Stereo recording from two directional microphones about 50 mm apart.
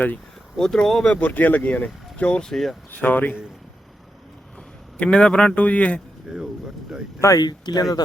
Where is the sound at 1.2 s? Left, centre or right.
Left.